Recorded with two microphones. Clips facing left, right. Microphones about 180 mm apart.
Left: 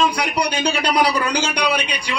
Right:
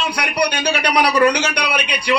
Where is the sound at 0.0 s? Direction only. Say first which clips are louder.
Even; 65° right (ahead or behind).